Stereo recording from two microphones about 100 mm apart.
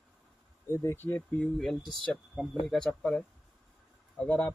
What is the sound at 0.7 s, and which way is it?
Speech, 25° left (ahead or behind).